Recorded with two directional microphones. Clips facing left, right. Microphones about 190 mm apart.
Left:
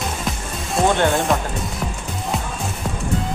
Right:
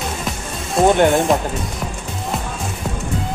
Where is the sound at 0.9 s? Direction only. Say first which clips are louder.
Right 4 dB; 15° right (ahead or behind).